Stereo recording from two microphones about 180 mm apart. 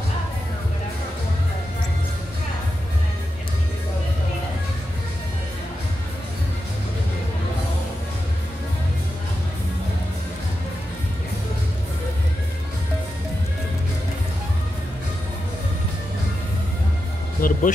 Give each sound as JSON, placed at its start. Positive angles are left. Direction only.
{"t": 17.4, "sound": "music", "side_deg": 50}